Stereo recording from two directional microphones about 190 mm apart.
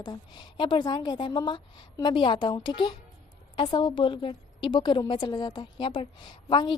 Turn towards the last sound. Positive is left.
turn(degrees=25)  # may be behind; listen again after turning